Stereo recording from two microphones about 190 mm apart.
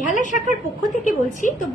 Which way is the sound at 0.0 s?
40° left (ahead or behind).